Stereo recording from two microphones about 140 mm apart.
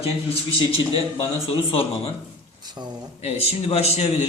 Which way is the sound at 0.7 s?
40° left (ahead or behind).